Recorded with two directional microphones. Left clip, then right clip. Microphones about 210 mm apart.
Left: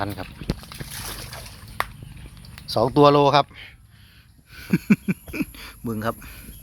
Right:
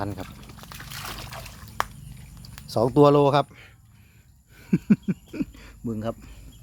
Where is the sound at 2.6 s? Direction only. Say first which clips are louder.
Left 2 dB; 20° right (ahead or behind).